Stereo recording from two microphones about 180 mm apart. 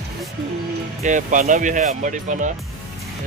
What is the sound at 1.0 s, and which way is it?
Speech, 45° right (ahead or behind).